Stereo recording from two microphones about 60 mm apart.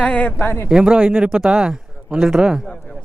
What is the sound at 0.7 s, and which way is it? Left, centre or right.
Speech, centre.